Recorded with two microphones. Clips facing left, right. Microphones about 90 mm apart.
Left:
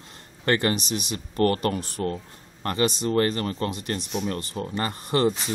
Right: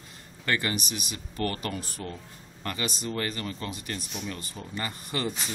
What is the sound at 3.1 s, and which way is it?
Speech, 45° left (ahead or behind).